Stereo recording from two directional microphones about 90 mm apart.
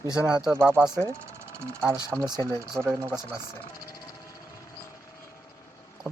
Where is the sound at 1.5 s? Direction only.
30° right (ahead or behind).